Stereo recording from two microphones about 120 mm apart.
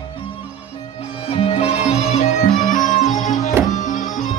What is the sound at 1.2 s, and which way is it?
Music, 55° left (ahead or behind).